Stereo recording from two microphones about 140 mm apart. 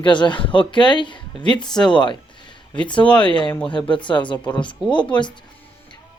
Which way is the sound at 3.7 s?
35° left (ahead or behind).